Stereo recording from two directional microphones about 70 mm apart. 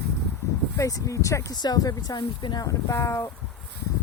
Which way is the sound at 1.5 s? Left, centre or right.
Left.